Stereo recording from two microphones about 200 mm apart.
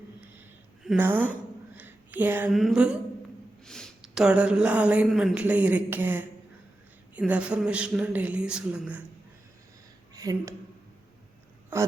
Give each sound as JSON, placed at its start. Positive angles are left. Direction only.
{"t": 0.9, "sound": "a woman's voice", "side_deg": -10}
{"t": 1.7, "sound": "a sound", "side_deg": -10}
{"t": 2.5, "sound": "speech", "side_deg": 0}
{"t": 10.2, "sound": "speech", "side_deg": -20}